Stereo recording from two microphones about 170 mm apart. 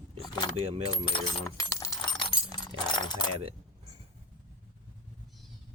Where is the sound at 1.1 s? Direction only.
20° left (ahead or behind).